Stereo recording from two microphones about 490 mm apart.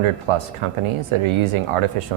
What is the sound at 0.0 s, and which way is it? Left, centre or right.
Speech, right.